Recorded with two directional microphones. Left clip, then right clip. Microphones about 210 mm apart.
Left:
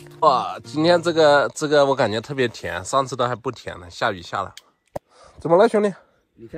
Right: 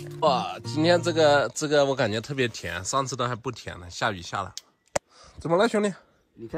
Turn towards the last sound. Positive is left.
turn(degrees=-10)  # may be behind; listen again after turning